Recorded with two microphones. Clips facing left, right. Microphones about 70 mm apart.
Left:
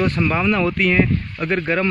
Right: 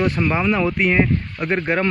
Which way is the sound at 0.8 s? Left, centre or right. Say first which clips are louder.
Even; right.